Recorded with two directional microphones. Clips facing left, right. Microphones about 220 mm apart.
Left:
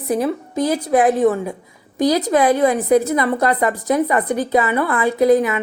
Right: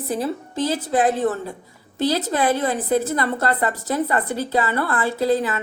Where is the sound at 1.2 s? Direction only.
15° left (ahead or behind).